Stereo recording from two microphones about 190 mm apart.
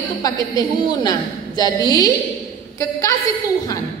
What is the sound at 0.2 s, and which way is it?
A woman's voice, 20° left (ahead or behind).